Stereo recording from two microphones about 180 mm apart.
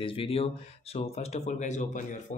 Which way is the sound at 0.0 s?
30° left (ahead or behind).